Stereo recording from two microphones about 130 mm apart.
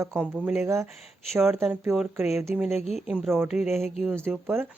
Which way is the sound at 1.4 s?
Centre (ahead or behind).